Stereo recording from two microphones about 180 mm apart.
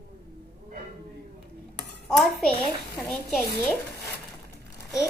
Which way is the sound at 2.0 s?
Centre (ahead or behind).